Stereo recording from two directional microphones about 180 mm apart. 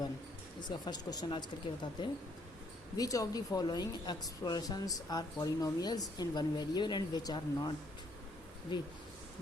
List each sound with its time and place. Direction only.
0.9 s a woman's voice: 25° left (ahead or behind)